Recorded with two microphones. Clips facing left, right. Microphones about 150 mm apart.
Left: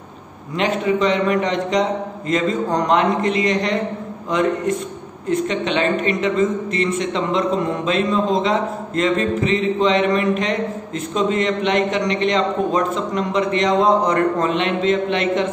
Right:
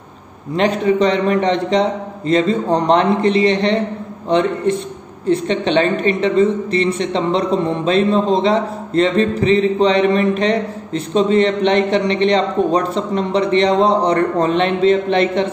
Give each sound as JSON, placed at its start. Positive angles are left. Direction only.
{"t": 0.6, "sound": "a woman's voice", "side_deg": -35}